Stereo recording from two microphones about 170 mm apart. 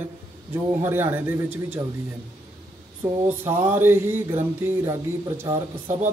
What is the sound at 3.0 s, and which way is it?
A man's voice, 15° right (ahead or behind).